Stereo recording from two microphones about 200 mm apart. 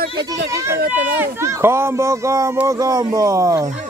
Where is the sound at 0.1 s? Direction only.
20° right (ahead or behind).